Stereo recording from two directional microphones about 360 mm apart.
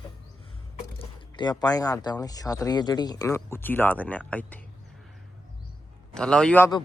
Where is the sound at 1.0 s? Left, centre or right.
Centre.